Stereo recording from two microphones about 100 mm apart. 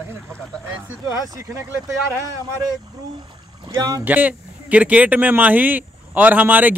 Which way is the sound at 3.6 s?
35° right (ahead or behind).